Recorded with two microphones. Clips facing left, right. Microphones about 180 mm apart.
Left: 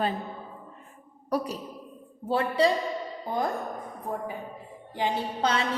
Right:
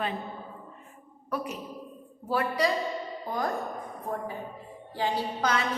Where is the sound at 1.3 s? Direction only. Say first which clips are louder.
Left 5 dB; 40° left (ahead or behind).